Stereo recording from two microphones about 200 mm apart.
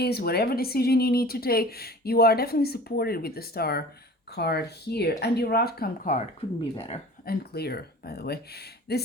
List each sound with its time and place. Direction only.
0.0 s speech: 55° left (ahead or behind)
6.7 s speech: 30° left (ahead or behind)
7.3 s speech: 50° left (ahead or behind)